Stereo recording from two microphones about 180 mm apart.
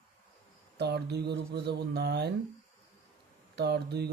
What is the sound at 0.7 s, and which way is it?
Speech, 65° right (ahead or behind).